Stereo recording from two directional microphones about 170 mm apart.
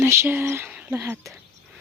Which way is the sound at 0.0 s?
15° right (ahead or behind).